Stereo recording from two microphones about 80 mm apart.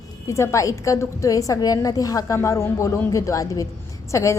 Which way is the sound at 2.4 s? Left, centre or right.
Left.